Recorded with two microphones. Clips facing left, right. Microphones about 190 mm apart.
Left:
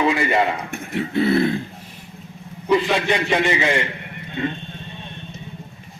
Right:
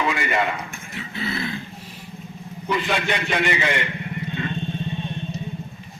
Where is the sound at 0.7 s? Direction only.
60° left (ahead or behind).